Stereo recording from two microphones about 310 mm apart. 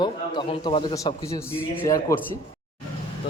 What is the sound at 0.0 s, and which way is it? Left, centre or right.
Speech, centre.